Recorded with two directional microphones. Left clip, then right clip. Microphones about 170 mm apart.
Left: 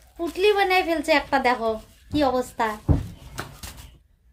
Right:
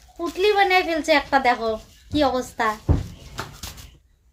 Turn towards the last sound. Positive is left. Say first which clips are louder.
# right 3 dB
turn(degrees=-25)  # may be behind; listen again after turning